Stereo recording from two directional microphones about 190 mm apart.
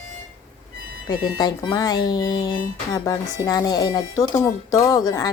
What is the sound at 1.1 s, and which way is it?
Speech, 20° left (ahead or behind).